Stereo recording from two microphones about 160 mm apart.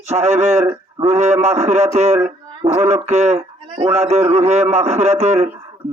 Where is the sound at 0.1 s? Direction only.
45° right (ahead or behind).